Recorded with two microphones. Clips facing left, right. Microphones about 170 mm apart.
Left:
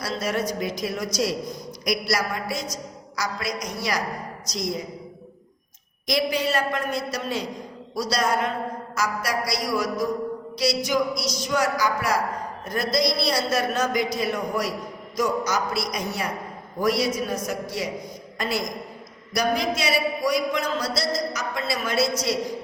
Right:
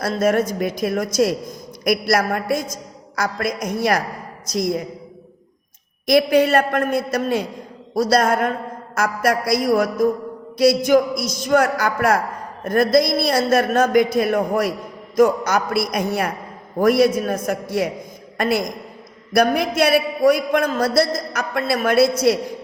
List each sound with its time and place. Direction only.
0.0 s a man's voice: 50° right (ahead or behind)
6.1 s a man's voice: 55° right (ahead or behind)